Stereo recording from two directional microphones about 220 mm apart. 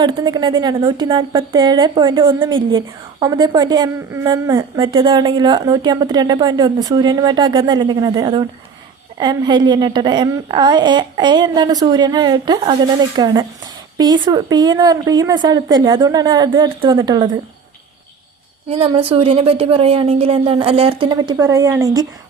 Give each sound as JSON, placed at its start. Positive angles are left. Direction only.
{"t": 0.0, "sound": "a woman's voice", "side_deg": -20}
{"t": 18.7, "sound": "a woman's voice", "side_deg": -25}